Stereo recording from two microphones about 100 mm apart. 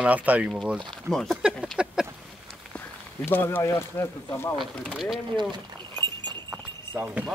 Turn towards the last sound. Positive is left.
turn(degrees=-20)  # may be behind; listen again after turning